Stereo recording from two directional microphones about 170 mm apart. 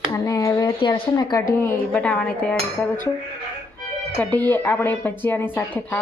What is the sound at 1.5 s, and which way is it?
Speech, 10° left (ahead or behind).